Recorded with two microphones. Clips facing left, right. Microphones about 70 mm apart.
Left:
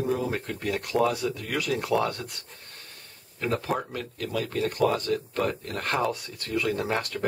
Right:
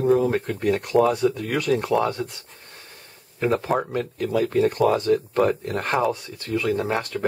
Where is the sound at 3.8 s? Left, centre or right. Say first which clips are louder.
Right 8 dB; right.